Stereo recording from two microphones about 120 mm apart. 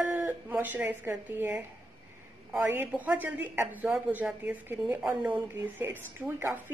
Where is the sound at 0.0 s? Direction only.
15° right (ahead or behind).